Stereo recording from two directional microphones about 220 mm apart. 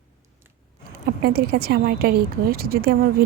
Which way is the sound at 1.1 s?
45° right (ahead or behind).